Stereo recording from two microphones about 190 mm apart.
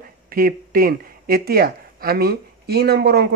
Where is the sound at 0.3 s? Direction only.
50° right (ahead or behind).